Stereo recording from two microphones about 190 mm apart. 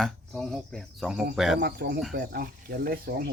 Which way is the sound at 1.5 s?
55° right (ahead or behind).